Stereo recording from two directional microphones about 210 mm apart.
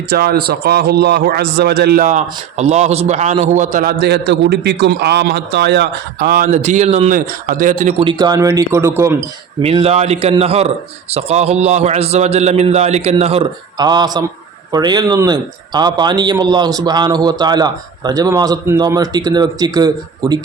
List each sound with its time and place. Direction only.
0.1 s a man's voice: 45° right (ahead or behind)
6.5 s a man's voice: 35° right (ahead or behind)
7.9 s speech: 20° right (ahead or behind)
9.6 s speech: 25° right (ahead or behind)